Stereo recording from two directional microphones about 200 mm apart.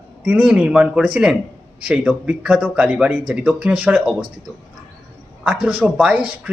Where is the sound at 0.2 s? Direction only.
5° right (ahead or behind).